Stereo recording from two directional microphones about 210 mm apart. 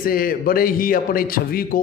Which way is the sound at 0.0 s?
45° left (ahead or behind).